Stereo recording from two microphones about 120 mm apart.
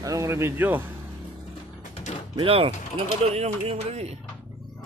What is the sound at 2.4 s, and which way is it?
Speech, 50° right (ahead or behind).